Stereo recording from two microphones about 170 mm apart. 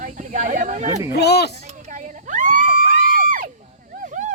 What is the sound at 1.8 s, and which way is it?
Crowd, 45° right (ahead or behind).